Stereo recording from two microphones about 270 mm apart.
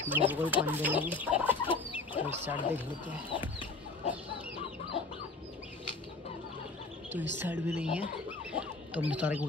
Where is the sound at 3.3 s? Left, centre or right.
Centre.